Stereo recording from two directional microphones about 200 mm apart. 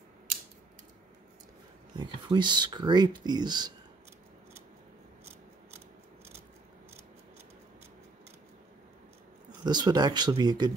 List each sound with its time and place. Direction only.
2.0 s speech: 25° right (ahead or behind)
9.7 s speech: 20° right (ahead or behind)